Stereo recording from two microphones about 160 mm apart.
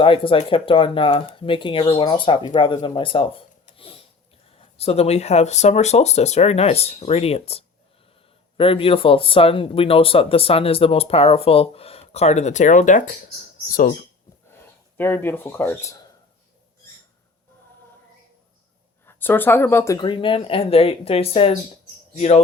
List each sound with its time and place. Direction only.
0.0 s speech: 35° left (ahead or behind)
3.8 s a sound: 35° left (ahead or behind)
4.8 s speech: 40° left (ahead or behind); by 13.9 s 65° left (ahead or behind)
14.5 s speech: 15° left (ahead or behind)
19.0 s speech: 15° left (ahead or behind)
20.0 s speech: 30° left (ahead or behind)